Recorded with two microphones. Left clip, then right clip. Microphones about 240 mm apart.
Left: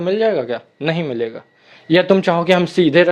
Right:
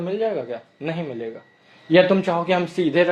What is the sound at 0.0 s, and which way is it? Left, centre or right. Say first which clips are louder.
A man's voice: left 7 dB; left.